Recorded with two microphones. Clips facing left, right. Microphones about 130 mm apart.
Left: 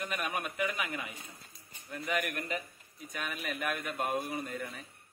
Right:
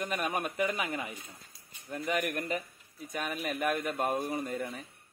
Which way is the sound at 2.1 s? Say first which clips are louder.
Right 2 dB; 40° right (ahead or behind).